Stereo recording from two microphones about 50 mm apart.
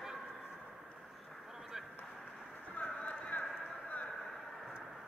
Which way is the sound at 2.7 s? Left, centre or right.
Left.